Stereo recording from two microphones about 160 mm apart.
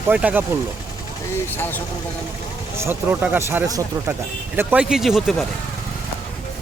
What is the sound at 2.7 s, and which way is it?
Speech, 15° right (ahead or behind).